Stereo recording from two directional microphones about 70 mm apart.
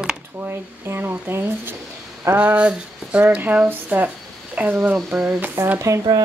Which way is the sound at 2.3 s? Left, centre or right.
Centre.